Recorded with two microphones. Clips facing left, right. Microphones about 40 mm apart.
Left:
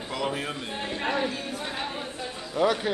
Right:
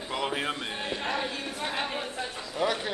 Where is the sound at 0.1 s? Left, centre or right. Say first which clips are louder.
Even; right.